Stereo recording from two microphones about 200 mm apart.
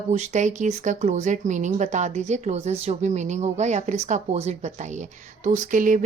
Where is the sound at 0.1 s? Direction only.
35° right (ahead or behind).